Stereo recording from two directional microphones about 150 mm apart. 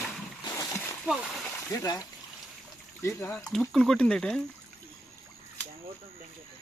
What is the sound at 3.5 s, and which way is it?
Speech, centre (ahead or behind).